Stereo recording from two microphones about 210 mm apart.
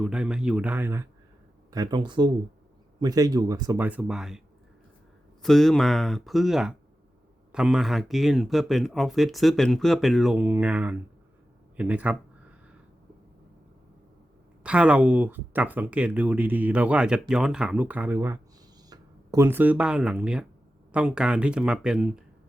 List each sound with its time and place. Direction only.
0.0 s speech: 5° right (ahead or behind)
5.4 s speech: centre (ahead or behind)
14.6 s speech: 5° right (ahead or behind)